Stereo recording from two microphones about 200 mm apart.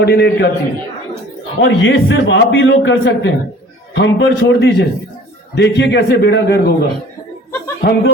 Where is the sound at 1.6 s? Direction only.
65° left (ahead or behind).